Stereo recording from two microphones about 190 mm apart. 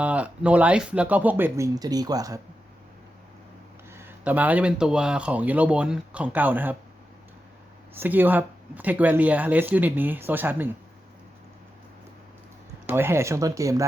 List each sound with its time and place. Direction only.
0.0 s speech: 5° right (ahead or behind)
3.9 s speech: 10° right (ahead or behind)
7.9 s speech: 10° right (ahead or behind)
12.8 s speech: 10° right (ahead or behind)